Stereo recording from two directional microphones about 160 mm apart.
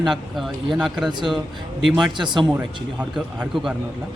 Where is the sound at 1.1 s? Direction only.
30° right (ahead or behind).